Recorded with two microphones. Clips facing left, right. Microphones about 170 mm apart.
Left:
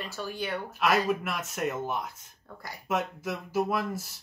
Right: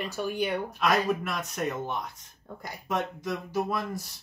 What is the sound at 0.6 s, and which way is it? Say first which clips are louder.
Speech: left 3 dB; 5° left (ahead or behind).